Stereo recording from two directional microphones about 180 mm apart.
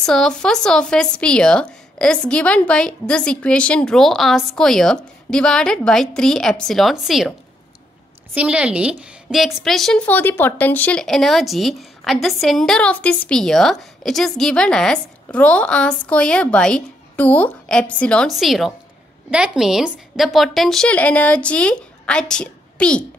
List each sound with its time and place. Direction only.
0.0 s a woman's voice: 5° left (ahead or behind)
8.4 s a woman's voice: 5° right (ahead or behind)